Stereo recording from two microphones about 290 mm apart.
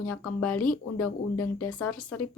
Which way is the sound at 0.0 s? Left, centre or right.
Left.